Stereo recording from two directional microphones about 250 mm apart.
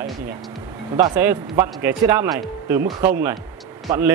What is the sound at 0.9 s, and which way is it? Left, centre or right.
A man's voice, centre.